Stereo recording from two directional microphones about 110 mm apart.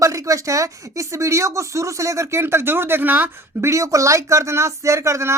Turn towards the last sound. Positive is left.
turn(degrees=-25)  # may be behind; listen again after turning